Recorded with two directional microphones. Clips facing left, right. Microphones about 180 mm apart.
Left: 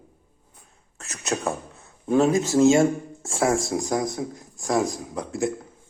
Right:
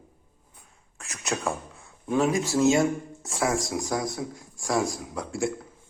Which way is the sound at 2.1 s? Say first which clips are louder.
Left 5 dB; 25° left (ahead or behind).